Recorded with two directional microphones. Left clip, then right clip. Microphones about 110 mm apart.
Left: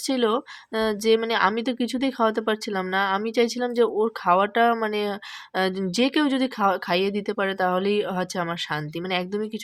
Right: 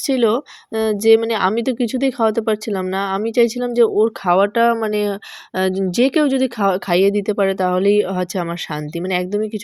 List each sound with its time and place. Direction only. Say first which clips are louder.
0.1 s a woman's voice: right 6 dB; 40° right (ahead or behind)